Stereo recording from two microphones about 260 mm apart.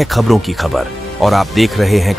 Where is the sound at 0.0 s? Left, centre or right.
Centre.